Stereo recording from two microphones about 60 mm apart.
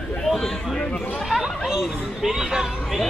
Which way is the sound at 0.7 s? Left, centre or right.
Centre.